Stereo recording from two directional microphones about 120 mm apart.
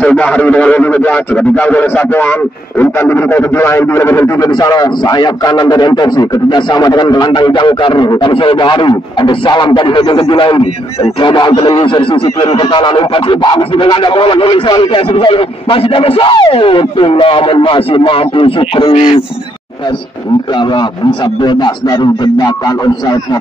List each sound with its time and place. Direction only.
0.0 s a man's voice: 10° left (ahead or behind); by 18.9 s 45° left (ahead or behind)
21.5 s a man's voice: 40° left (ahead or behind)